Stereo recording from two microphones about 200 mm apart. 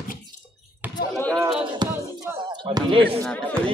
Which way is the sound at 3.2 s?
5° left (ahead or behind).